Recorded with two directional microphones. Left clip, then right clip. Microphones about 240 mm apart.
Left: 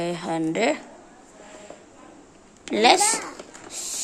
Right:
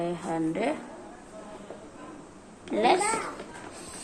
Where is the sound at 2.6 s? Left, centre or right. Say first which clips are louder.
Left 6 dB; left.